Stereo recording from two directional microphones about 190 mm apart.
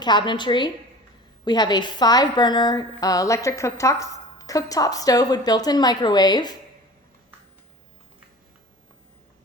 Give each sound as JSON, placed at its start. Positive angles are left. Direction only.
{"t": 0.0, "sound": "a woman's voice", "side_deg": 25}